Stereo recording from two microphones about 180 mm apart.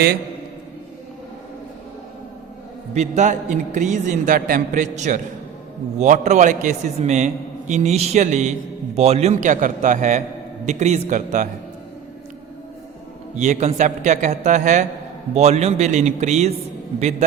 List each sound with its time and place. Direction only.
2.9 s a man's voice: 40° right (ahead or behind)
13.3 s a man's voice: 40° right (ahead or behind)